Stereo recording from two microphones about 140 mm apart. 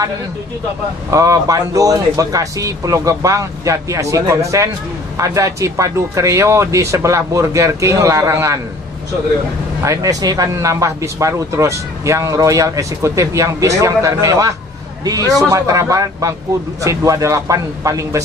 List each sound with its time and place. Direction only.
1.1 s speech: 25° right (ahead or behind)
9.8 s speech: 25° right (ahead or behind)